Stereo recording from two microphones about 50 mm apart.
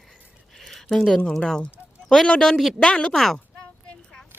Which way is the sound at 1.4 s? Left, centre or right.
Centre.